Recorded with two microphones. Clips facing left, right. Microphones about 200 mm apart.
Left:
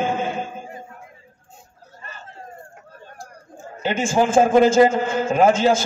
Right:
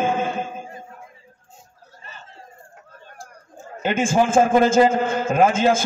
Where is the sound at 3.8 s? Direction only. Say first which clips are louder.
Even; 50° right (ahead or behind).